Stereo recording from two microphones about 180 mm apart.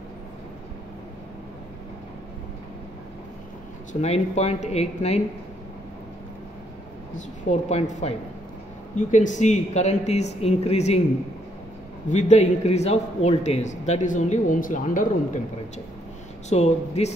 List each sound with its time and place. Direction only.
4.0 s a man's voice: 35° left (ahead or behind)
7.4 s a man's voice: 40° left (ahead or behind)
12.1 s a man's voice: 40° left (ahead or behind)
16.4 s a man's voice: 35° left (ahead or behind)